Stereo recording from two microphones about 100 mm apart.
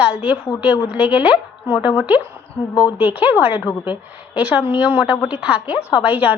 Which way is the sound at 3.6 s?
50° left (ahead or behind).